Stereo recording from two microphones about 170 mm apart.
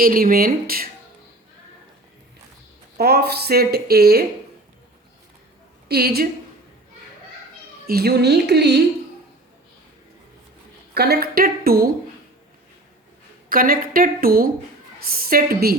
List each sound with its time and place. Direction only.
0.0 s a woman's voice: 60° right (ahead or behind)
3.0 s speech: 70° right (ahead or behind)
5.9 s a woman's voice: 65° right (ahead or behind)
7.9 s speech: 70° right (ahead or behind)
10.9 s a woman's voice: 70° right (ahead or behind)
13.5 s a woman's voice: 55° right (ahead or behind)